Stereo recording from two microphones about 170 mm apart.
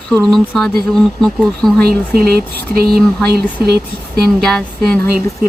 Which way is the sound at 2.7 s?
65° right (ahead or behind).